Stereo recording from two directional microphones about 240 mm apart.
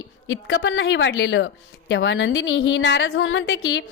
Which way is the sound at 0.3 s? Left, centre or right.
Left.